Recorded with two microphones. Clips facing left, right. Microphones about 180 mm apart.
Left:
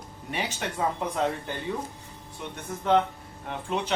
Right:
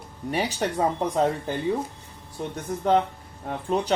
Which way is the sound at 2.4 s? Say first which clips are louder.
Right 6 dB; 35° right (ahead or behind).